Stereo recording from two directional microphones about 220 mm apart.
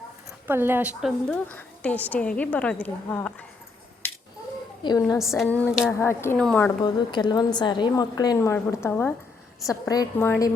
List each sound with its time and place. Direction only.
0.4 s a woman's voice: 10° right (ahead or behind)
1.5 s a woman's voice: 5° left (ahead or behind)
4.8 s a woman's voice: 15° left (ahead or behind)
6.8 s a woman's voice: 20° left (ahead or behind)